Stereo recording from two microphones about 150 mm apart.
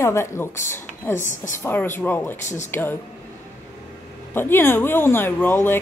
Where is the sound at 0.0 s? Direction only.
15° left (ahead or behind).